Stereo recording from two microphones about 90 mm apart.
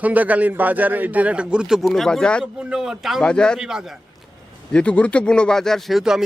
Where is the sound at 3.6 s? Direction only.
5° right (ahead or behind).